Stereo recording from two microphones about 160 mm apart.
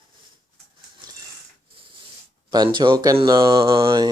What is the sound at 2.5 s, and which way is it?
Speech, 30° right (ahead or behind).